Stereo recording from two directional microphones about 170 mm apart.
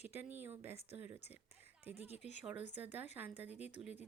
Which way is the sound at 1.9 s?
40° left (ahead or behind).